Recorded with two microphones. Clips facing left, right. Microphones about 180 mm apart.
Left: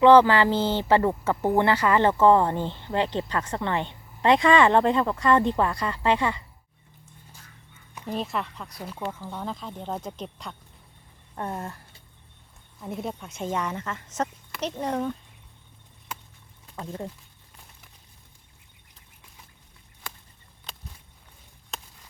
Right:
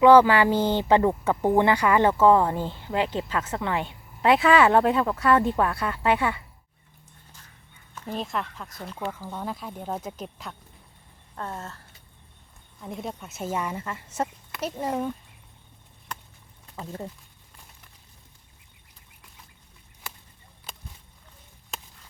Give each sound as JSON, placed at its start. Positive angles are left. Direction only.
{"t": 0.0, "sound": "speech", "side_deg": -10}
{"t": 8.0, "sound": "speech", "side_deg": 0}
{"t": 11.3, "sound": "speech", "side_deg": 15}
{"t": 12.8, "sound": "speech", "side_deg": 0}
{"t": 16.7, "sound": "speech", "side_deg": -5}